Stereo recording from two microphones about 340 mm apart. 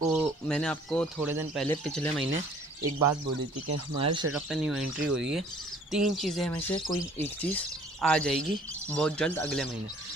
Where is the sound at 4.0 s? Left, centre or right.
Centre.